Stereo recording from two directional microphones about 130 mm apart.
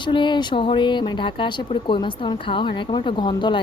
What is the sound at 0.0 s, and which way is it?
A woman's voice, 40° left (ahead or behind).